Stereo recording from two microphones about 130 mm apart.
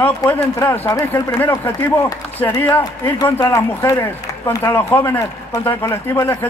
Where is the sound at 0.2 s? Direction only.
30° left (ahead or behind).